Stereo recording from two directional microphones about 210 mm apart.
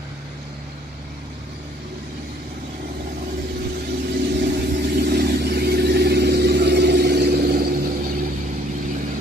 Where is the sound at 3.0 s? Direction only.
45° right (ahead or behind).